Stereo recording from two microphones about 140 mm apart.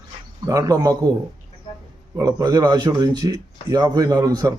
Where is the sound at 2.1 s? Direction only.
25° right (ahead or behind).